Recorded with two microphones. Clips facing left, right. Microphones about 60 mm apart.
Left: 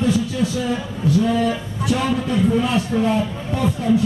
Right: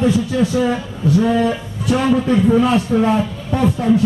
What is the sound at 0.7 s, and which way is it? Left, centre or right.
Speech, right.